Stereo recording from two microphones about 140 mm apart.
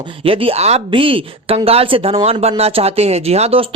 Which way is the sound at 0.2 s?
40° right (ahead or behind).